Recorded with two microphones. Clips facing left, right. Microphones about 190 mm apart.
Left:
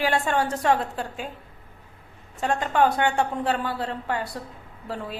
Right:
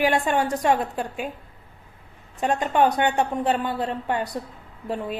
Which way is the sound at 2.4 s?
20° right (ahead or behind).